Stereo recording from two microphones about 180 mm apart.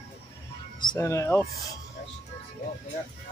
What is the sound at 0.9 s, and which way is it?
Speech, 15° left (ahead or behind).